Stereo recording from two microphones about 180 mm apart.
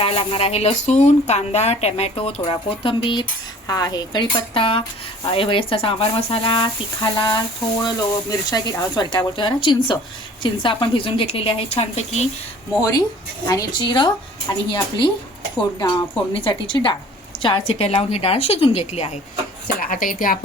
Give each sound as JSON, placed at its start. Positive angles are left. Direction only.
{"t": 0.0, "sound": "speech", "side_deg": 30}
{"t": 12.8, "sound": "speech", "side_deg": 20}
{"t": 19.6, "sound": "speech", "side_deg": 55}